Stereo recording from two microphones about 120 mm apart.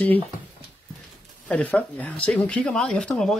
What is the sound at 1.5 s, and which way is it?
Speech, 10° left (ahead or behind).